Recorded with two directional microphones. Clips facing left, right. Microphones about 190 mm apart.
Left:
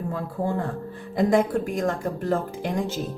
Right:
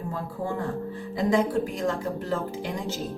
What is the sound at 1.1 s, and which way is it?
A woman's voice, 55° left (ahead or behind).